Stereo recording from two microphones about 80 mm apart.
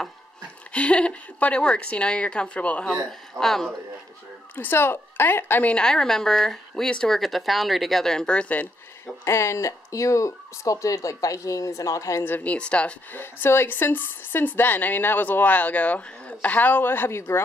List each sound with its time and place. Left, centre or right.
0.7 s a woman's voice: centre
4.6 s speech: left
5.7 s speech: centre
9.2 s speech: left
12.3 s a woman's voice: centre
13.1 s speech: left